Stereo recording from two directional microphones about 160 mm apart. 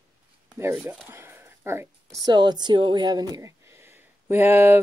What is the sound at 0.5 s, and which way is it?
Speech, 15° right (ahead or behind).